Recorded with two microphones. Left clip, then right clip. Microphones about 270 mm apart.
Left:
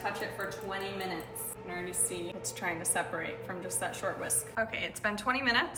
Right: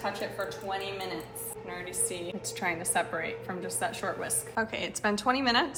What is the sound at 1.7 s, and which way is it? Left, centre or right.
Speech, right.